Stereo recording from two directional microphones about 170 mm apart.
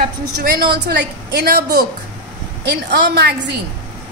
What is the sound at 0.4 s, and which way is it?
A woman's voice, 65° right (ahead or behind).